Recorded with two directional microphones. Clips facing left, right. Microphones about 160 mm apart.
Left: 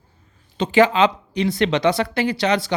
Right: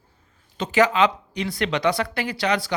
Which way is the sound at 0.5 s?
25° left (ahead or behind).